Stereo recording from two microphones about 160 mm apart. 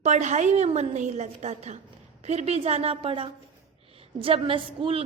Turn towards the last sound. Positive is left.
turn(degrees=-35)  # may be behind; listen again after turning